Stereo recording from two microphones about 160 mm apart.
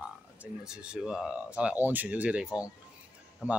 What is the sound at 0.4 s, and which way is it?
Speech, 5° right (ahead or behind).